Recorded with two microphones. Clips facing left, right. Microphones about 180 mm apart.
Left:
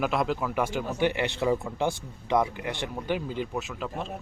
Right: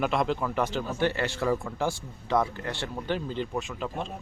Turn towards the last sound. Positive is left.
turn(degrees=0)  # may be behind; listen again after turning